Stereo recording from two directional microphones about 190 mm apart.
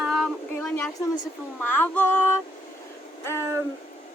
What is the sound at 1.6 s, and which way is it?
Speech, 10° left (ahead or behind).